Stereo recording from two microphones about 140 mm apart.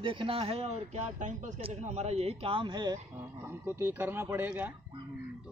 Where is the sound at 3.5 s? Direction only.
15° right (ahead or behind).